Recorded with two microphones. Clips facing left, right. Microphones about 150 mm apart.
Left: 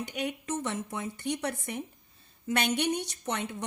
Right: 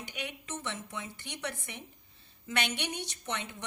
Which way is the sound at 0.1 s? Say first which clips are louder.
Left 8 dB; 45° left (ahead or behind).